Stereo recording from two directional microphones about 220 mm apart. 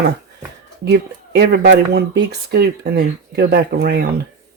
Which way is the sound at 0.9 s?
50° right (ahead or behind).